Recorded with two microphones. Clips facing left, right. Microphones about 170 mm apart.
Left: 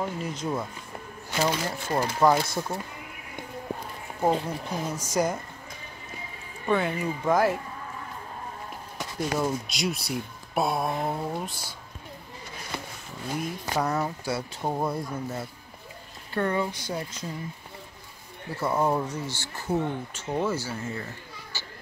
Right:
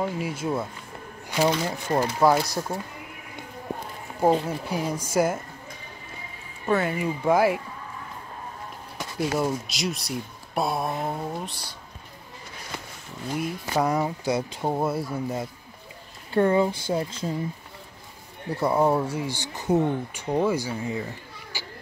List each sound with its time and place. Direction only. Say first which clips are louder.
0.0 s speech: right 3 dB; 10° right (ahead or behind)
4.2 s speech: right 4 dB; 10° right (ahead or behind)
6.6 s speech: right 2 dB; 5° right (ahead or behind)
9.3 s speech: even; 5° right (ahead or behind)
13.4 s speech: right 4 dB; 10° right (ahead or behind)
16.3 s speech: right 6 dB; 25° right (ahead or behind)
18.6 s speech: right 4 dB; 15° right (ahead or behind)
21.5 s children playing: right 4 dB; 15° right (ahead or behind)